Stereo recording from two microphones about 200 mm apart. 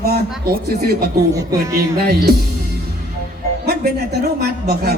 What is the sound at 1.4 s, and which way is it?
Speech, 15° right (ahead or behind).